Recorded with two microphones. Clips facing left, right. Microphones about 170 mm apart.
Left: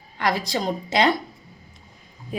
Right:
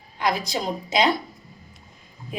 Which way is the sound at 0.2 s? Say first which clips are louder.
Left 1 dB; 15° right (ahead or behind).